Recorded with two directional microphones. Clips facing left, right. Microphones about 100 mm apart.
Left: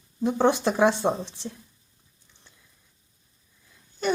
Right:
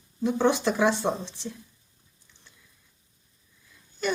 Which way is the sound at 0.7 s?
45° left (ahead or behind).